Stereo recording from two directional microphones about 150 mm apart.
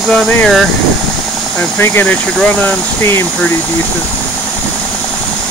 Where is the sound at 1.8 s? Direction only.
15° left (ahead or behind).